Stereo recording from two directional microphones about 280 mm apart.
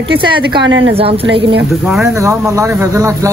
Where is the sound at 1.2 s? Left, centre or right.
Right.